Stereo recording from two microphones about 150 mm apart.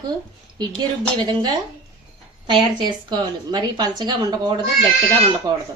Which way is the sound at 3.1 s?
30° right (ahead or behind).